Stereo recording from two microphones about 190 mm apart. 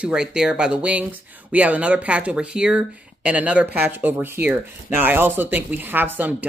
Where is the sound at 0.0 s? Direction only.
5° right (ahead or behind).